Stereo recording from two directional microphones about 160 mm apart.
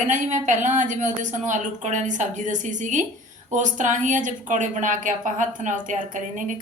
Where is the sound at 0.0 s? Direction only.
50° right (ahead or behind).